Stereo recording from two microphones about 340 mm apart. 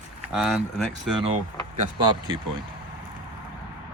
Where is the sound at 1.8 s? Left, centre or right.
Centre.